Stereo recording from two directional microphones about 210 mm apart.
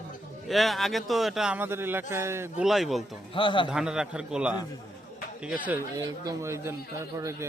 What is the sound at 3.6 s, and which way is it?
A man's voice, 5° right (ahead or behind).